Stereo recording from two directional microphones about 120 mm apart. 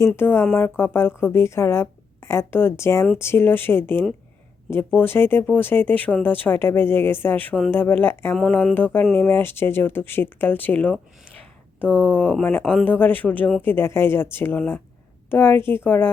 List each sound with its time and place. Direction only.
0.2 s a woman's voice: 20° left (ahead or behind)
8.4 s speech: 10° left (ahead or behind)